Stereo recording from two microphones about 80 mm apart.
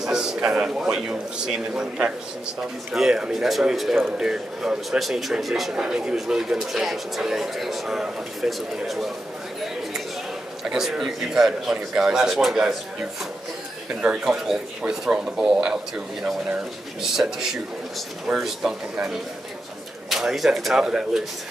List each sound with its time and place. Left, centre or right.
0.0 s a man's voice: centre
10.6 s a man's voice: centre
14.0 s a man's voice: centre